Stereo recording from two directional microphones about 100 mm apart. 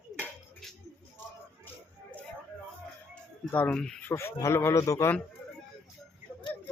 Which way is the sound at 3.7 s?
5° left (ahead or behind).